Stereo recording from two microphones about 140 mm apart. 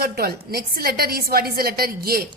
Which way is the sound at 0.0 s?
90° right.